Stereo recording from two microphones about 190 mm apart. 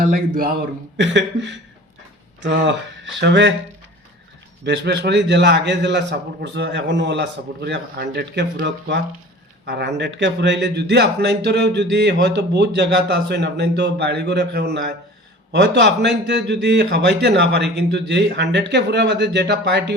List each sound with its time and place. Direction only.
0.0 s a man's voice: 50° right (ahead or behind)
1.0 s speech: 70° right (ahead or behind)
4.6 s a man's voice: 65° right (ahead or behind)